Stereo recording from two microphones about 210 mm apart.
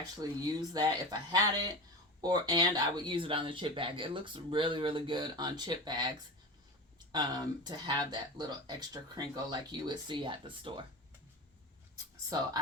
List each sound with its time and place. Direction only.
0.2 s speech: 20° right (ahead or behind)